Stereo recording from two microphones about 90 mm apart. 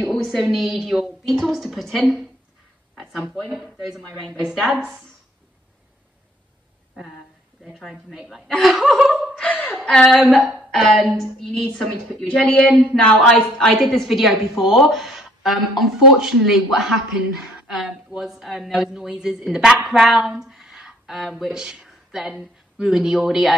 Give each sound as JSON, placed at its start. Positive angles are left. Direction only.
{"t": 0.0, "sound": "a woman's voice", "side_deg": 0}
{"t": 4.5, "sound": "a woman's voice", "side_deg": -5}
{"t": 4.8, "sound": "speech", "side_deg": 5}
{"t": 7.9, "sound": "a woman's voice", "side_deg": -5}
{"t": 9.4, "sound": "a woman's voice", "side_deg": 15}
{"t": 10.0, "sound": "a woman's voice", "side_deg": 0}
{"t": 18.1, "sound": "speech", "side_deg": -5}